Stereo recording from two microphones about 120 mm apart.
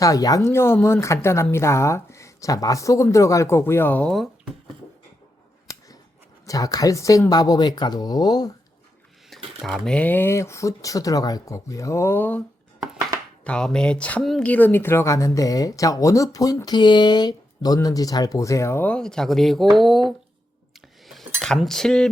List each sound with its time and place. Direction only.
0.0 s speech: 30° left (ahead or behind)
4.1 s speech: centre (ahead or behind)
6.4 s speech: 30° left (ahead or behind)
9.6 s speech: centre (ahead or behind); by 12.4 s 15° left (ahead or behind)
13.4 s speech: 10° left (ahead or behind); by 18.9 s 25° left (ahead or behind)
18.9 s speech: 5° left (ahead or behind)